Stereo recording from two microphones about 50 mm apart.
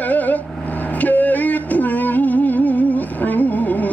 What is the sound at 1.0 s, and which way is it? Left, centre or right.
Music, left.